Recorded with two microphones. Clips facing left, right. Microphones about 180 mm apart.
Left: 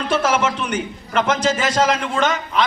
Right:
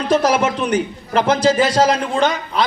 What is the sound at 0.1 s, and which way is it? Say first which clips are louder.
A man's voice: right 4 dB; 35° right (ahead or behind).